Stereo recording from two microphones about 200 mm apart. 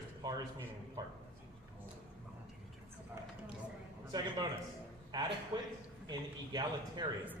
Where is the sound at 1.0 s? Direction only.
20° right (ahead or behind).